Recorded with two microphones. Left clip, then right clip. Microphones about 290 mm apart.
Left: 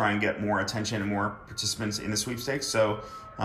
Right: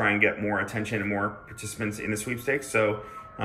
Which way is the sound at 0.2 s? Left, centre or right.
Centre.